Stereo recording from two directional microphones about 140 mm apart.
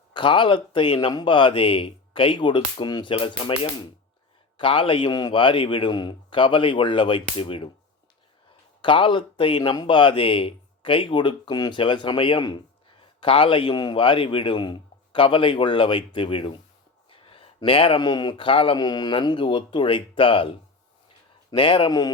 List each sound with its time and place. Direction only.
0.1 s speech: 35° left (ahead or behind)
8.8 s speech: 35° left (ahead or behind)
21.5 s speech: 40° left (ahead or behind)